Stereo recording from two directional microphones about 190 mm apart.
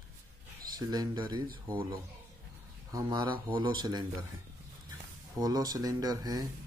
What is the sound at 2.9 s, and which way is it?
Speech, 20° right (ahead or behind).